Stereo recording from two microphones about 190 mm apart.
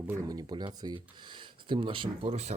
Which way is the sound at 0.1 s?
20° right (ahead or behind).